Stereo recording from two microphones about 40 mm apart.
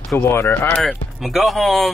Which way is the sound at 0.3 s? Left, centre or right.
Left.